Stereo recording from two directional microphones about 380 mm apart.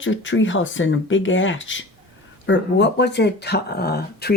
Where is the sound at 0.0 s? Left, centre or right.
Left.